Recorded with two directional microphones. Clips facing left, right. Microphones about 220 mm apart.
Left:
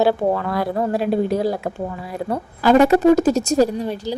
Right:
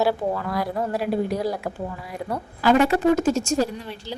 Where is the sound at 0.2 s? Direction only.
65° left (ahead or behind).